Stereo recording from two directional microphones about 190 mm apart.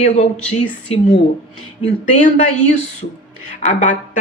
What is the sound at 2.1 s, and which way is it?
Speech, 40° left (ahead or behind).